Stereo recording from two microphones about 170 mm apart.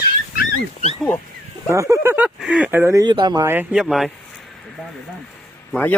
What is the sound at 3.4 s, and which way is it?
Speech, 5° right (ahead or behind).